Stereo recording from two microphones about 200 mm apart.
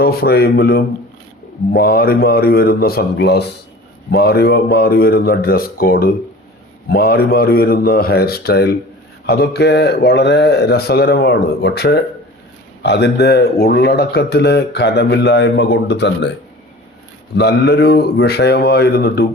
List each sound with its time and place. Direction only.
0.0 s speech: 50° left (ahead or behind)
17.3 s speech: 55° left (ahead or behind)